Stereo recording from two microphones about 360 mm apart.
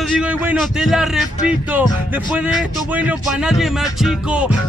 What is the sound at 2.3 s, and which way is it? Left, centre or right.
Music, centre.